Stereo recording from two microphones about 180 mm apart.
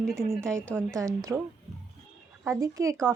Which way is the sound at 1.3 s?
10° right (ahead or behind).